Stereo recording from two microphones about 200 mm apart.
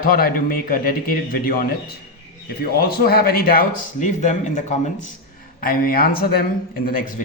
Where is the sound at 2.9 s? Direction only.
50° left (ahead or behind).